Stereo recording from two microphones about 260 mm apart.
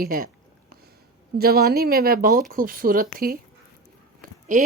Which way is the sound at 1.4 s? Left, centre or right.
Right.